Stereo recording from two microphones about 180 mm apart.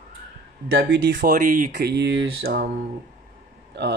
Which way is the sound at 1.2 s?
50° right (ahead or behind).